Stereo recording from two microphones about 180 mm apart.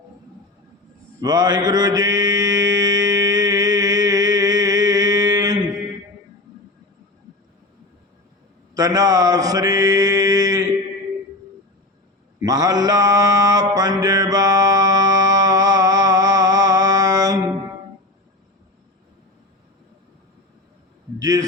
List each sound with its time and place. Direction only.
1.2 s mantra: 20° right (ahead or behind)
8.7 s mantra: 20° right (ahead or behind)
12.4 s mantra: 20° right (ahead or behind)
21.2 s a sound: 20° right (ahead or behind)